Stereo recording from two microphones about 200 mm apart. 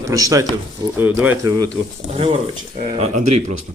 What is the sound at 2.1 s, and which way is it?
Speech, 30° right (ahead or behind).